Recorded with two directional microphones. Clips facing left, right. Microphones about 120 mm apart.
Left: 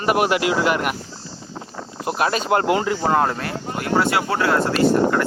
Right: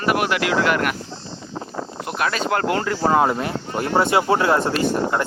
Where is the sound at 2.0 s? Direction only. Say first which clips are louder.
Left 3 dB; 25° left (ahead or behind).